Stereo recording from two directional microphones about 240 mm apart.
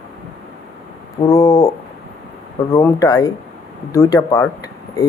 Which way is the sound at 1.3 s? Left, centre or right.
Centre.